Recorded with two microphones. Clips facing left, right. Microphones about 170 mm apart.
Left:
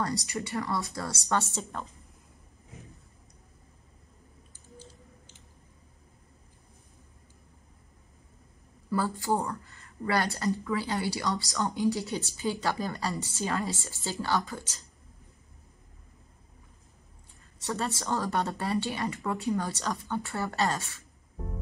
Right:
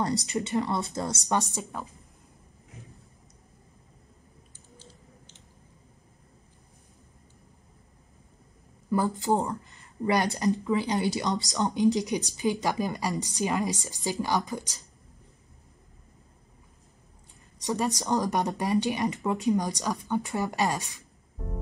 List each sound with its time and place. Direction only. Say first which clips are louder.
0.0 s a woman's voice: right 4 dB; 20° right (ahead or behind)
8.9 s speech: right 3 dB; 20° right (ahead or behind)
17.6 s speech: right 4 dB; 15° right (ahead or behind)